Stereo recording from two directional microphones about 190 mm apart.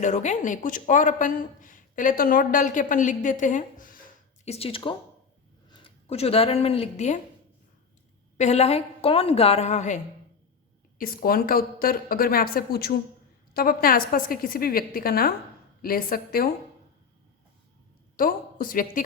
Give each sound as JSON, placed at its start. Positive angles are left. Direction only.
{"t": 0.0, "sound": "a woman's voice", "side_deg": 40}
{"t": 4.4, "sound": "speech", "side_deg": 30}
{"t": 8.4, "sound": "a woman's voice", "side_deg": 35}
{"t": 10.9, "sound": "a woman's voice", "side_deg": 50}
{"t": 18.2, "sound": "a woman's voice", "side_deg": 45}